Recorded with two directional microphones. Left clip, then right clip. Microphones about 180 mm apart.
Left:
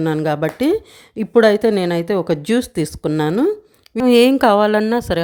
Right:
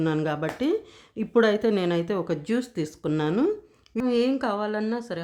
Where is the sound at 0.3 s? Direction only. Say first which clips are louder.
Left 9 dB; 35° left (ahead or behind).